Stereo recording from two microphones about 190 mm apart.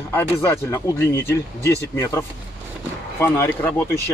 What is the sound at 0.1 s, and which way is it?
Speech, 15° left (ahead or behind).